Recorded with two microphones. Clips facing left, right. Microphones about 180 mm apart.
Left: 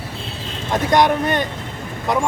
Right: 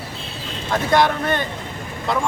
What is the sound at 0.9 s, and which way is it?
Speech, 15° left (ahead or behind).